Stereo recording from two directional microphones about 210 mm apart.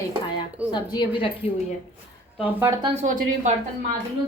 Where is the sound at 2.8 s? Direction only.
35° right (ahead or behind).